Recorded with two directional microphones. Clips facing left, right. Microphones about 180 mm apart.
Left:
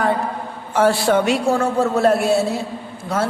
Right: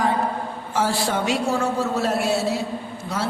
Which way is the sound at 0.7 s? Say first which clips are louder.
Left 7 dB; 60° left (ahead or behind).